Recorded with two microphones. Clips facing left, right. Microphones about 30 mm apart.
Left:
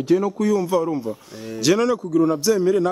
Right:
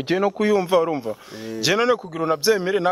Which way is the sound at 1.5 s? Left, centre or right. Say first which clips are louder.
Left 1 dB; right.